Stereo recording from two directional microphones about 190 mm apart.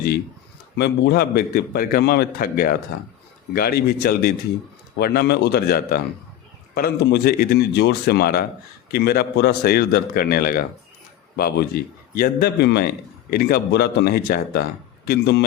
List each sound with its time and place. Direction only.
0.8 s a man's voice: 60° left (ahead or behind)